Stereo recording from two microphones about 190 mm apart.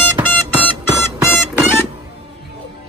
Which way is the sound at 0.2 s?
10° right (ahead or behind).